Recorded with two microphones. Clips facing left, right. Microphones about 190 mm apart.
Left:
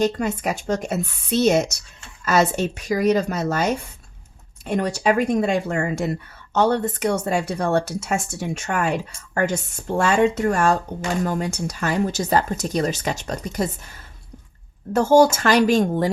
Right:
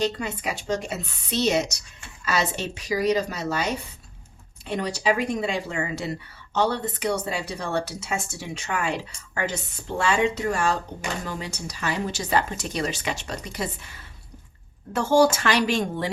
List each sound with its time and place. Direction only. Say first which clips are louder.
0.0 s speech: left 5 dB; 45° left (ahead or behind)